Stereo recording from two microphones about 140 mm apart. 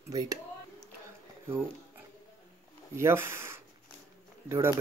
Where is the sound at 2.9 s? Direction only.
20° right (ahead or behind).